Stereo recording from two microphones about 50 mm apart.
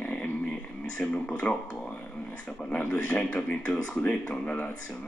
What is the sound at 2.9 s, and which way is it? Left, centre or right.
Speech, left.